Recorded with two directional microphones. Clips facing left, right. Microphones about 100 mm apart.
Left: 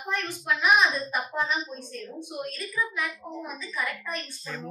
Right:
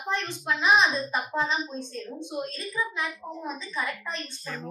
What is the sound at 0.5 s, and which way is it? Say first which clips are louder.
A woman's voice: even; 25° right (ahead or behind).